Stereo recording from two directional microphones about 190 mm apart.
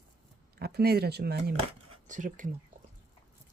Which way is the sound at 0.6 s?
55° right (ahead or behind).